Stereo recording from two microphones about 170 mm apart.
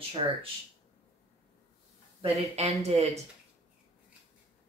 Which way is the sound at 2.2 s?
40° right (ahead or behind).